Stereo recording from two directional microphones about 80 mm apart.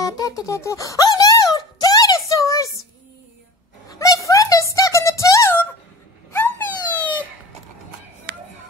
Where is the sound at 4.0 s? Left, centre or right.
Left.